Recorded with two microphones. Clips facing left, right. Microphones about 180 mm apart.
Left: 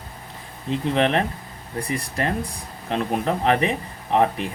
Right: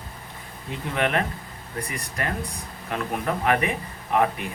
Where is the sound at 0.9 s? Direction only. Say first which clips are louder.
Left 2 dB; 25° left (ahead or behind).